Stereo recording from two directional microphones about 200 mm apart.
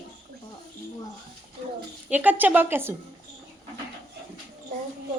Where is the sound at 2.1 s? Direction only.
10° right (ahead or behind).